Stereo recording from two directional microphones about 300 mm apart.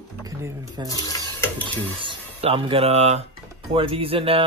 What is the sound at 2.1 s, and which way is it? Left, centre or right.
Speech, centre.